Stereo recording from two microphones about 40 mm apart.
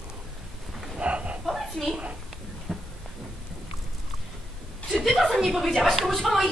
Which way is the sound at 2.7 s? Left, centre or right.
Centre.